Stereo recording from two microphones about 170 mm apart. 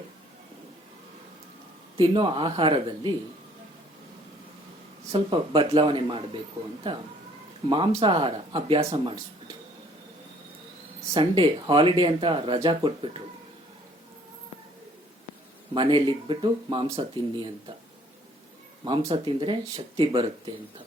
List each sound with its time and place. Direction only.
2.0 s speech: 30° right (ahead or behind)
5.1 s speech: 30° right (ahead or behind)
8.0 s speech: 30° right (ahead or behind)
11.1 s speech: 30° right (ahead or behind)
15.7 s speech: 30° right (ahead or behind)
18.9 s speech: 30° right (ahead or behind)